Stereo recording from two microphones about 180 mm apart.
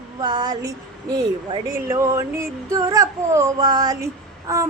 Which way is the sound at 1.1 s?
20° right (ahead or behind).